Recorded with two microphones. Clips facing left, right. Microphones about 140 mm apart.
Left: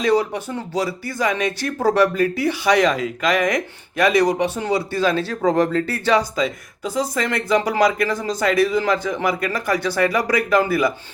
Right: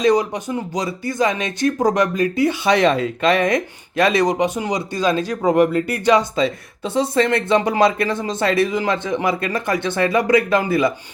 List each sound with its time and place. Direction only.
0.0 s speech: 15° right (ahead or behind)
5.5 s a sound: 15° right (ahead or behind)
6.3 s speech: 30° right (ahead or behind)